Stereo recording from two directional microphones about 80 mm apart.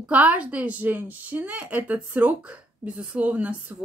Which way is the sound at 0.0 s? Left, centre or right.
Centre.